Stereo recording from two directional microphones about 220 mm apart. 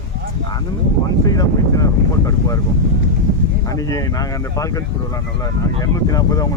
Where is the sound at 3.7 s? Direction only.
15° left (ahead or behind).